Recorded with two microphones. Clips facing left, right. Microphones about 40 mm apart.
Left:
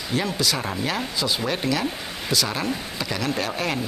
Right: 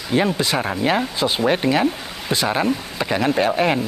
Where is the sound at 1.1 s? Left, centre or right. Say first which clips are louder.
Right 6 dB; right.